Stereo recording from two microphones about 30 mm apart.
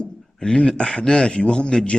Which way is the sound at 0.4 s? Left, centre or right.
Left.